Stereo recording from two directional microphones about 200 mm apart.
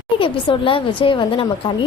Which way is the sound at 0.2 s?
25° left (ahead or behind).